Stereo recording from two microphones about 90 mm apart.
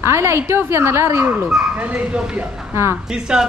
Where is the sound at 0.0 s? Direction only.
30° right (ahead or behind).